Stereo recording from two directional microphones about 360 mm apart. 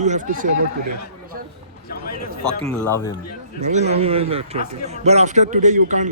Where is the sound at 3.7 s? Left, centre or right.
Centre.